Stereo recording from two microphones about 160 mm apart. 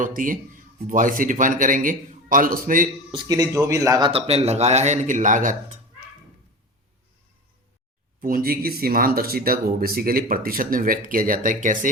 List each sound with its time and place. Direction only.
0.0 s speech: 55° right (ahead or behind)
3.1 s speech: 25° right (ahead or behind)
4.1 s speech: 40° right (ahead or behind)
8.2 s speech: 65° right (ahead or behind)